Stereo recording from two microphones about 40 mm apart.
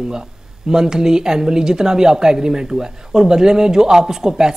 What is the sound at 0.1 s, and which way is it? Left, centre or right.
Speech, centre.